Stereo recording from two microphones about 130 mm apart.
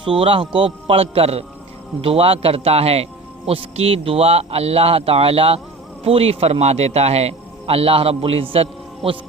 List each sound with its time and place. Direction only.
0.0 s a man's voice: 40° right (ahead or behind)